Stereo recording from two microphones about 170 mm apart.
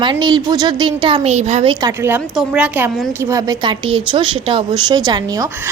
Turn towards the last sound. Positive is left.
turn(degrees=-25)  # may be behind; listen again after turning